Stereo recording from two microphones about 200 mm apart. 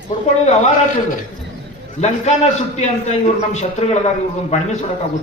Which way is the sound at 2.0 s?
35° left (ahead or behind).